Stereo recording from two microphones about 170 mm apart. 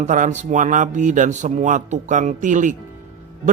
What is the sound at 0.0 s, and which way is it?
A man's voice, 45° right (ahead or behind).